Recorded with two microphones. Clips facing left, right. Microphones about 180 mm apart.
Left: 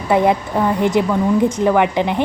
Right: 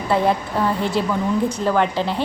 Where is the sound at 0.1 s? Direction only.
15° left (ahead or behind).